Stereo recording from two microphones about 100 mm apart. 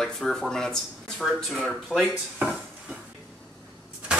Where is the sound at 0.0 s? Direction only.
5° left (ahead or behind).